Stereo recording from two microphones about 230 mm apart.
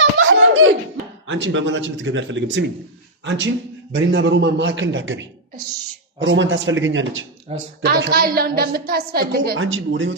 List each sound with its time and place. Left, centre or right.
0.0 s giggle: right
1.3 s a man's voice: right
7.5 s speech: right
7.9 s a woman's voice: right
9.6 s a man's voice: right